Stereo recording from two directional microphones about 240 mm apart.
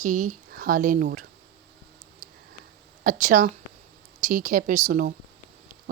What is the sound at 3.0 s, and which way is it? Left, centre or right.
Speech, right.